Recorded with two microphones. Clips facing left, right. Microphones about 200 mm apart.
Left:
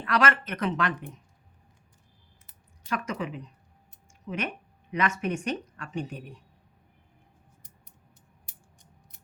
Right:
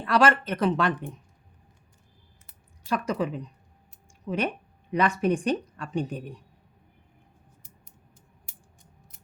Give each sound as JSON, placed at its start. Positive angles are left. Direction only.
{"t": 0.0, "sound": "speech", "side_deg": -30}
{"t": 2.9, "sound": "speech", "side_deg": -35}